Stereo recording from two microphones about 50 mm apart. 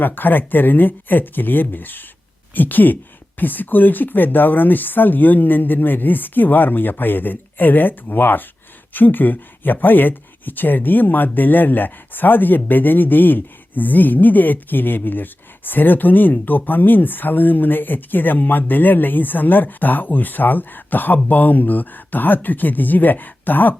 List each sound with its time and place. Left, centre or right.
0.0 s speech: left